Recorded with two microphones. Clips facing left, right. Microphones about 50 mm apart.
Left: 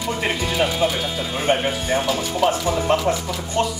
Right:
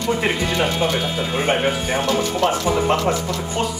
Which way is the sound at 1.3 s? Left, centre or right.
Right.